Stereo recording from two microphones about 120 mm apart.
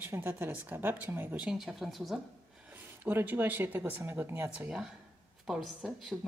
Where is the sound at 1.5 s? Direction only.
5° right (ahead or behind).